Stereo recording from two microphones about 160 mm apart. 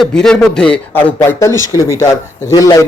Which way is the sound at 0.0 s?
5° left (ahead or behind).